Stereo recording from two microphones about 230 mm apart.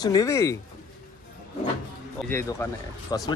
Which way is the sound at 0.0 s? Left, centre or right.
Centre.